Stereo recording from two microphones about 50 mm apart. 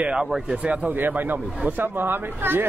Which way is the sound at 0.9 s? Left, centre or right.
Right.